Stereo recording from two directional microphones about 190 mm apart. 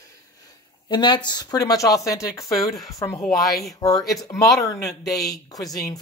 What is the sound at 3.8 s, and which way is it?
Speech, 20° left (ahead or behind).